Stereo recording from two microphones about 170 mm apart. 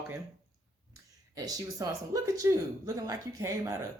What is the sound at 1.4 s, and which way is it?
Speech, 20° right (ahead or behind).